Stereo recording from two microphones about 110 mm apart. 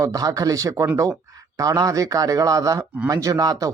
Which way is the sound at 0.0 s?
30° right (ahead or behind).